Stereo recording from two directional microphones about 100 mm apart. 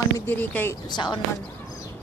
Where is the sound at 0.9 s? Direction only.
45° left (ahead or behind).